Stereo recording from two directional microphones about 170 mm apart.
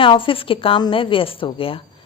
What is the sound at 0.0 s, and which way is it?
A woman's voice, 30° left (ahead or behind).